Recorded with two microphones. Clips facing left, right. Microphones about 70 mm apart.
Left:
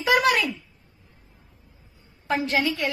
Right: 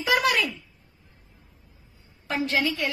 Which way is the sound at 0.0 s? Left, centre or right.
Left.